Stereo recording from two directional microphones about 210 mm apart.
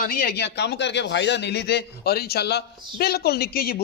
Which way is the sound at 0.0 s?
45° left (ahead or behind).